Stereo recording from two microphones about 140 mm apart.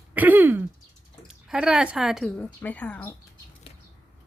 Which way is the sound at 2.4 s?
10° left (ahead or behind).